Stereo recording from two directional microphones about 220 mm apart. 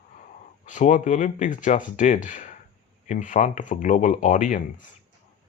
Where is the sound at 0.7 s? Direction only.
35° left (ahead or behind).